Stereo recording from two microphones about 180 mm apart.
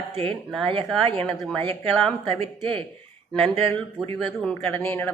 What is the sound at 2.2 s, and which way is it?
Speech, 30° right (ahead or behind).